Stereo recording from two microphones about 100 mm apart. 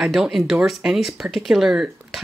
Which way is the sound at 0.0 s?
Centre (ahead or behind).